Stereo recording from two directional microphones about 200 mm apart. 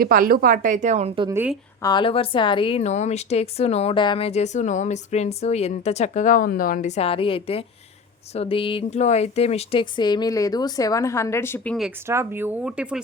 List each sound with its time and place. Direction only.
0.0 s speech: 45° right (ahead or behind); by 1.3 s 30° right (ahead or behind)
1.3 s speech: 10° right (ahead or behind)
1.8 s a woman's voice: 20° left (ahead or behind); by 11.9 s 5° left (ahead or behind)
12.0 s speech: 10° right (ahead or behind)